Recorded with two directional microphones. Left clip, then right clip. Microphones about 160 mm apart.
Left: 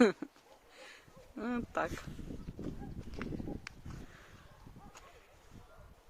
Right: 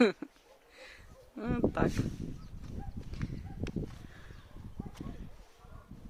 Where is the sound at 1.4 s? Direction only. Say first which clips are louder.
Right 4 dB; 5° left (ahead or behind).